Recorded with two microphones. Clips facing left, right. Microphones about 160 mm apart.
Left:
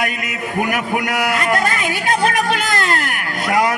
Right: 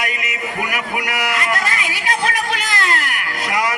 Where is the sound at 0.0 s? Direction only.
50° left (ahead or behind).